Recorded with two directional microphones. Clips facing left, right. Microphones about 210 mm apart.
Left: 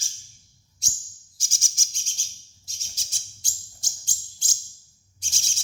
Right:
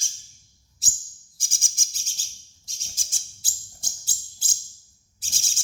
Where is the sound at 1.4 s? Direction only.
55° right (ahead or behind).